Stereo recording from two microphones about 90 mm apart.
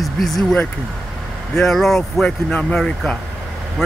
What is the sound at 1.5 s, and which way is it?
Speech, 5° left (ahead or behind).